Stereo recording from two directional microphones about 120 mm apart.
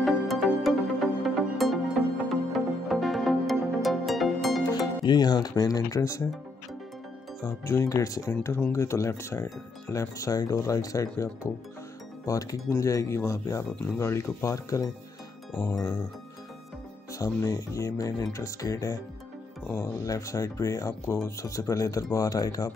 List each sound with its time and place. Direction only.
0.0 s music: centre (ahead or behind)
4.6 s speech: 35° left (ahead or behind)
7.4 s speech: 20° left (ahead or behind)
12.3 s speech: 30° left (ahead or behind)
17.1 s speech: 25° left (ahead or behind)